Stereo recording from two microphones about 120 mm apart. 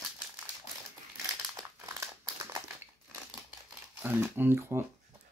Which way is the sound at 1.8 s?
25° right (ahead or behind).